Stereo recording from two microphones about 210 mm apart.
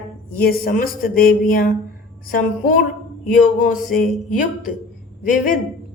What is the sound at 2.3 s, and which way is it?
A woman's voice, 40° left (ahead or behind).